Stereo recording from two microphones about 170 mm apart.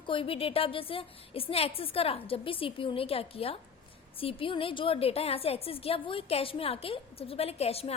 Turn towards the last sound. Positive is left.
turn(degrees=35)  # may be behind; listen again after turning